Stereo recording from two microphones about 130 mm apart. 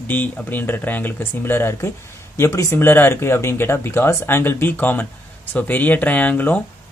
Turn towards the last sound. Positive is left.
turn(degrees=15)  # may be behind; listen again after turning